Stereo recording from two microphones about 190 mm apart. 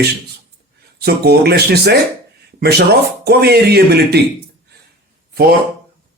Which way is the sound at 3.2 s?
55° right (ahead or behind).